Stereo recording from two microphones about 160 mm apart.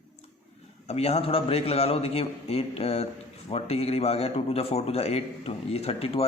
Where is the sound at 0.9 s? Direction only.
40° left (ahead or behind).